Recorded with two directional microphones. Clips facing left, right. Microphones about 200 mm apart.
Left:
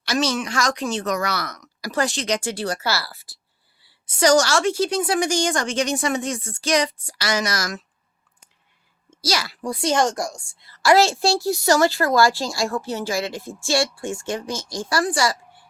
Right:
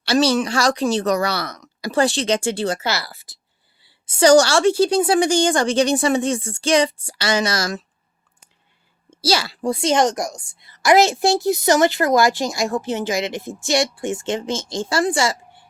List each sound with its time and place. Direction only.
0.0 s speech: 30° right (ahead or behind)
9.0 s speech: 30° right (ahead or behind)